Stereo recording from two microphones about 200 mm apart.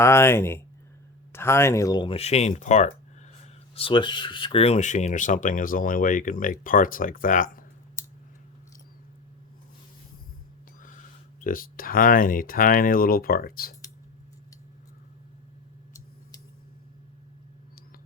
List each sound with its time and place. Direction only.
0.0 s speech: 15° left (ahead or behind); by 7.6 s 40° left (ahead or behind)
11.4 s speech: 45° left (ahead or behind)